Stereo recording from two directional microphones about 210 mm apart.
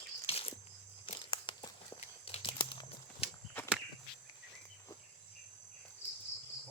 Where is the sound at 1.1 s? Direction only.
25° left (ahead or behind).